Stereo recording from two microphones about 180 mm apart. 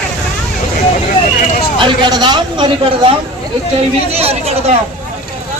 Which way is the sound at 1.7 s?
25° right (ahead or behind).